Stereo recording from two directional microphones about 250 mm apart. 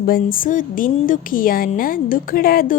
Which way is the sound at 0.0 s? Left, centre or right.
Left.